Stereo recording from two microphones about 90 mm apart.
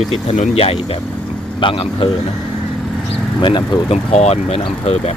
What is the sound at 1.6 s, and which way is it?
Speech, 75° left (ahead or behind).